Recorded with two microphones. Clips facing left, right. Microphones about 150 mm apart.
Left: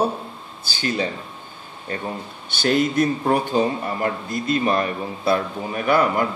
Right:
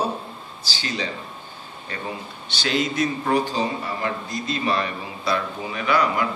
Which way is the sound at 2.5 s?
50° left (ahead or behind).